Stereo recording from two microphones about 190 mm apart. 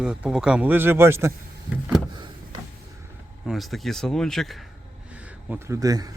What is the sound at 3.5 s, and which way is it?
Speech, centre (ahead or behind).